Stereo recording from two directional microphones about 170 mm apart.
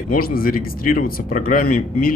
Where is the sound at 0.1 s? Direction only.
55° left (ahead or behind).